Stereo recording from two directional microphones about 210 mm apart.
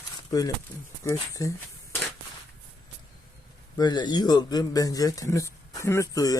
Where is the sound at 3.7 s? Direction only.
20° left (ahead or behind).